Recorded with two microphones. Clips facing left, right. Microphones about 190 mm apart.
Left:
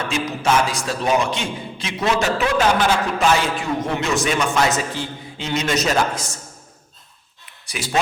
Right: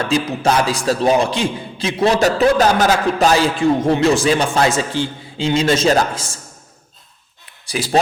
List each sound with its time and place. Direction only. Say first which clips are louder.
0.4 s a man's voice: right 1 dB; 35° right (ahead or behind)
7.6 s speech: right 7 dB; 35° right (ahead or behind)